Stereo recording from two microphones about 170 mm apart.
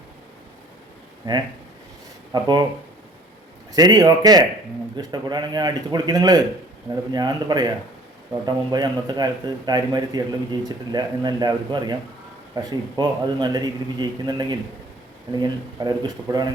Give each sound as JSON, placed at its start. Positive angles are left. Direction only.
{"t": 1.2, "sound": "a man's voice", "side_deg": -25}
{"t": 3.8, "sound": "a man's voice", "side_deg": -25}